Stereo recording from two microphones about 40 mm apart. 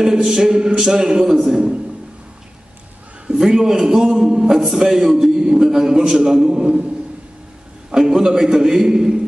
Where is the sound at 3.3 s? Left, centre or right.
Centre.